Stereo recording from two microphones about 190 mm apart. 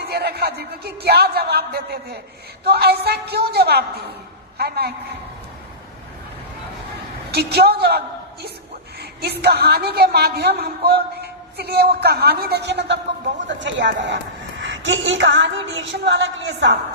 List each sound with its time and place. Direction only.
0.0 s a woman's voice: 55° right (ahead or behind)
7.3 s a woman's voice: 55° right (ahead or behind)